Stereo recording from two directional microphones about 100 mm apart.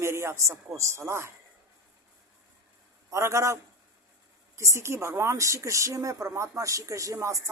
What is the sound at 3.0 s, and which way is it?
A woman's voice, 30° right (ahead or behind).